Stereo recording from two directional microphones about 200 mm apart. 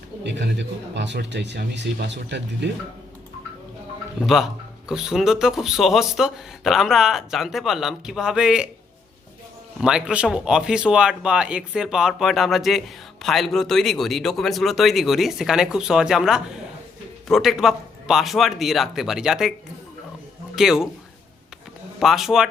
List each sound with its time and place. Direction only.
0.3 s speech: 60° right (ahead or behind)
4.2 s speech: centre (ahead or behind)
9.8 s speech: 5° right (ahead or behind)
20.6 s speech: centre (ahead or behind)
22.0 s speech: centre (ahead or behind)